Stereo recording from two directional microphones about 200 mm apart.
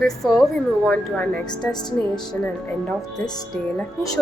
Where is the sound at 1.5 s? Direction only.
20° left (ahead or behind).